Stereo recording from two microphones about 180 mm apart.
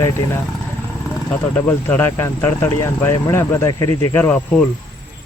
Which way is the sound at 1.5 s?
10° left (ahead or behind).